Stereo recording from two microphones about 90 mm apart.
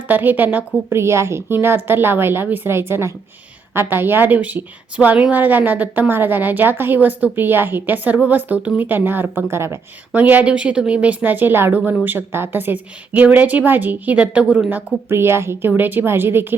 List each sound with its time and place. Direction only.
0.1 s a woman's voice: 20° right (ahead or behind)
10.1 s a woman's voice: 15° right (ahead or behind)